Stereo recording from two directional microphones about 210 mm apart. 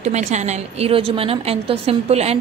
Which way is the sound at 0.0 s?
35° right (ahead or behind).